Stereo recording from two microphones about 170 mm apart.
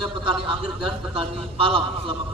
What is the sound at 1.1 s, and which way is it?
Speech, 30° right (ahead or behind).